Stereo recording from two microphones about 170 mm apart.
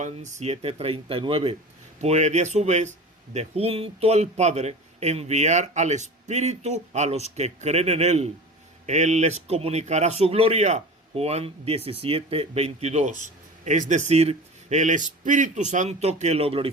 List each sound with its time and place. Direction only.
0.0 s a man's voice: 45° right (ahead or behind)